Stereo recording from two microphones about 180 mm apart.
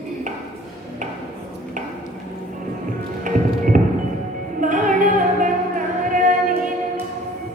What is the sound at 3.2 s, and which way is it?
Music, 45° right (ahead or behind).